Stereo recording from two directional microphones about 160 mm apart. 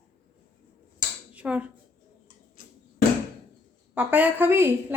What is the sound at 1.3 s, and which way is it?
Speech, 10° right (ahead or behind).